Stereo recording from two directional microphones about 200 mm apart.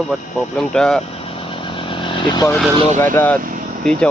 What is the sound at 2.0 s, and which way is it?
Speech, 20° left (ahead or behind).